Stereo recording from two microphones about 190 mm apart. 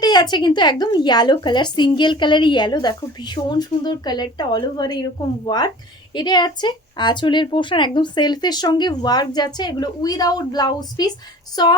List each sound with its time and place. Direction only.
0.0 s speech: 20° left (ahead or behind)